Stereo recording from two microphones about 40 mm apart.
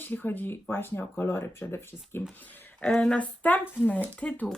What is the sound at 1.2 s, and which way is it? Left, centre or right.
Speech, left.